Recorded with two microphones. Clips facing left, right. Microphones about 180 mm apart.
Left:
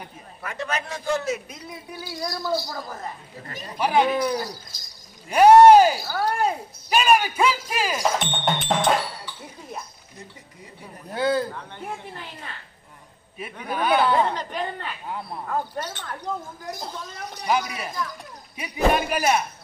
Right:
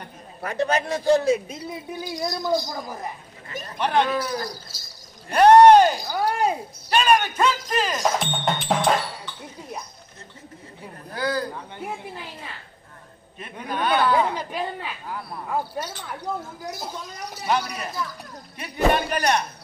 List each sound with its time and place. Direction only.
0.4 s a man's voice: 35° right (ahead or behind)
2.0 s speech: 20° right (ahead or behind)
3.6 s speech: 10° left (ahead or behind)
6.0 s speech: 15° right (ahead or behind)
6.9 s speech: 5° left (ahead or behind)
11.1 s speech: 25° left (ahead or behind)
11.5 s speech: 5° right (ahead or behind)
13.4 s speech: 5° left (ahead or behind)
14.1 s speech: 10° right (ahead or behind)
15.0 s speech: 25° left (ahead or behind)
15.4 s speech: 10° right (ahead or behind); by 19.4 s 5° left (ahead or behind)